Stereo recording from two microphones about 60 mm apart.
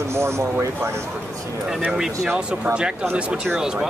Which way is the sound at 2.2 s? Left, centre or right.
Centre.